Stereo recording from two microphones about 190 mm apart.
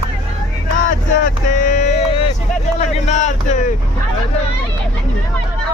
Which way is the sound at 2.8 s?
35° left (ahead or behind).